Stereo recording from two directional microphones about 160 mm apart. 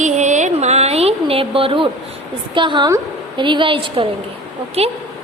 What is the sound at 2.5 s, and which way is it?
A woman's voice, 30° right (ahead or behind).